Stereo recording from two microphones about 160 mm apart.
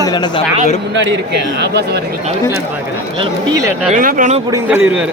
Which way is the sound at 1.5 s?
90° right.